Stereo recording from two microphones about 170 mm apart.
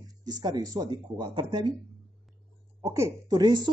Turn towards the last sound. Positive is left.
turn(degrees=-25)  # may be behind; listen again after turning